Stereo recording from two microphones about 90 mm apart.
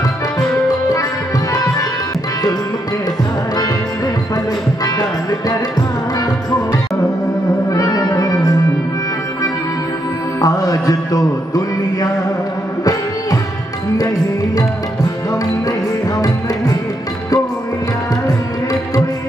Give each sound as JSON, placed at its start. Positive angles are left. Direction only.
{"t": 1.5, "sound": "music", "side_deg": 40}
{"t": 5.5, "sound": "music", "side_deg": 40}
{"t": 7.7, "sound": "music", "side_deg": 40}
{"t": 10.4, "sound": "music", "side_deg": 40}